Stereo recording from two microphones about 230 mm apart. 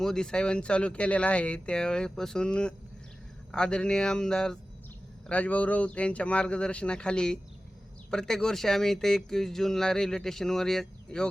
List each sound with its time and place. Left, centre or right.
0.0 s speech: centre